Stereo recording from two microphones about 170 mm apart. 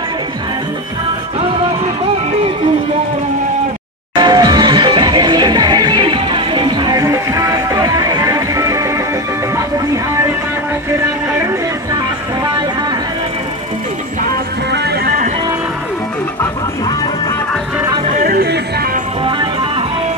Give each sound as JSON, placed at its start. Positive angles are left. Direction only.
{"t": 4.2, "sound": "music", "side_deg": -25}
{"t": 14.7, "sound": "music", "side_deg": -60}
{"t": 18.2, "sound": "music", "side_deg": -65}